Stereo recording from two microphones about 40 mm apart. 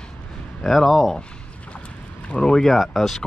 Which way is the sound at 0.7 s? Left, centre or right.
Centre.